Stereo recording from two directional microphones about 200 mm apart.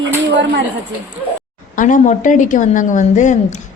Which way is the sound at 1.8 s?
40° left (ahead or behind).